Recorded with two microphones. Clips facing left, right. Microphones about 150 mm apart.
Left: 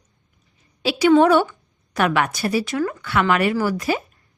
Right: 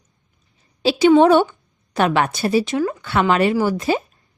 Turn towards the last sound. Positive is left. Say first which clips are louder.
# right 3 dB
turn(degrees=-25)  # may be behind; listen again after turning